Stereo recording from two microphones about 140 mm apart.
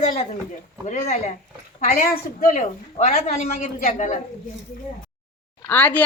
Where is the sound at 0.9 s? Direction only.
60° left (ahead or behind).